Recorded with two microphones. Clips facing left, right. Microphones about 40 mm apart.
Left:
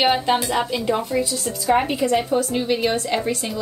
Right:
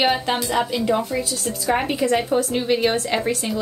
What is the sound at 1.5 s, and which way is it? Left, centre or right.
A woman's voice, centre.